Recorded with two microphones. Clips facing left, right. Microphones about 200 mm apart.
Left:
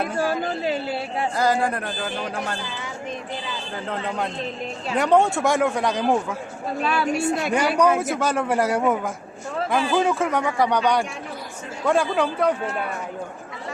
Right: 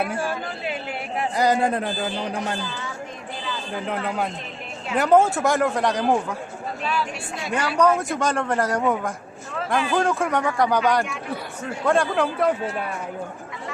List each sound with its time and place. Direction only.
0.2 s a man's voice: 40° left (ahead or behind)
1.4 s speech: 20° right (ahead or behind)
4.9 s a man's voice: centre (ahead or behind)
6.8 s speech: 65° left (ahead or behind)
7.5 s a man's voice: 10° left (ahead or behind)